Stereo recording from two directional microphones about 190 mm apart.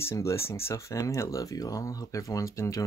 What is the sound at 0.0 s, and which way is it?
Speech, 15° left (ahead or behind).